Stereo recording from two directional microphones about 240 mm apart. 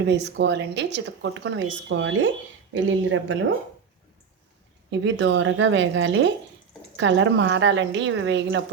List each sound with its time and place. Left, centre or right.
0.0 s speech: right
4.9 s speech: right